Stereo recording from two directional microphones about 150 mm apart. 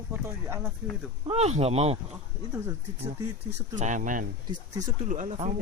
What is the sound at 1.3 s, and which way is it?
Speech, 45° right (ahead or behind).